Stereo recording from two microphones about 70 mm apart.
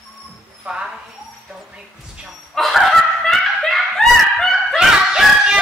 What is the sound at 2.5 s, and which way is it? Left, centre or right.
Speech, centre.